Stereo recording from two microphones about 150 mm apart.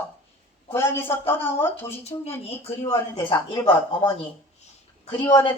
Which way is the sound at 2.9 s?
20° left (ahead or behind).